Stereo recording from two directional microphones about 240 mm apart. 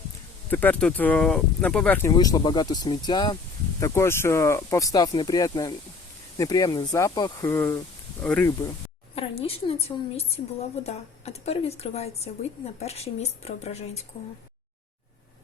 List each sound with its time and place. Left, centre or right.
0.5 s speech: centre
9.1 s a woman's voice: left